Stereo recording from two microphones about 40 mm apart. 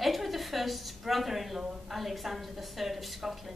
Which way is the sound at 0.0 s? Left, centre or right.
Centre.